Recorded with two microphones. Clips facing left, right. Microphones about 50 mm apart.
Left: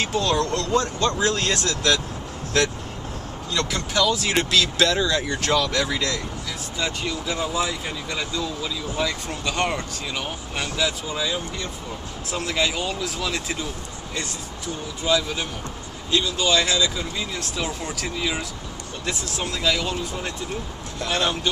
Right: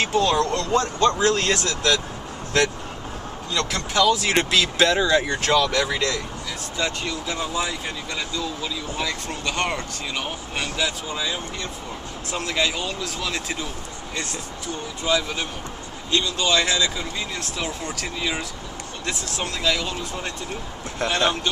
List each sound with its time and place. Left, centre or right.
0.0 s speech: centre
3.9 s speech: centre
6.8 s speech: centre
15.0 s speech: centre
16.1 s speech: centre